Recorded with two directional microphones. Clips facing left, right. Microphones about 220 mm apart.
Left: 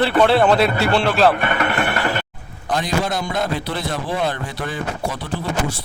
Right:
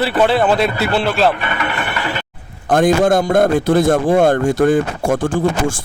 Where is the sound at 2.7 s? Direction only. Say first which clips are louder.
Right 9 dB; 50° right (ahead or behind).